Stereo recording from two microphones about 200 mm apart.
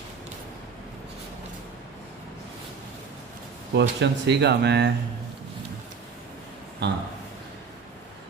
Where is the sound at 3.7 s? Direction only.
60° right (ahead or behind).